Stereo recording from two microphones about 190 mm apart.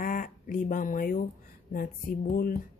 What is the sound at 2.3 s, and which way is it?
Speech, 50° left (ahead or behind).